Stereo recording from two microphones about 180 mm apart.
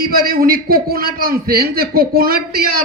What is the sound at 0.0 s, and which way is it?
A man's voice, 55° right (ahead or behind).